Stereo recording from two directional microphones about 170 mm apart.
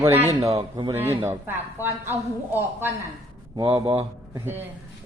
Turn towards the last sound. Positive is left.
turn(degrees=-15)  # may be behind; listen again after turning